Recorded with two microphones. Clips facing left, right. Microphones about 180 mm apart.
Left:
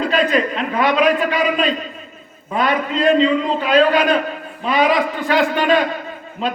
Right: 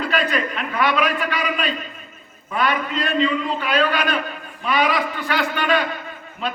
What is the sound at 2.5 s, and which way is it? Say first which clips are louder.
A man's voice: left 3 dB; 30° left (ahead or behind).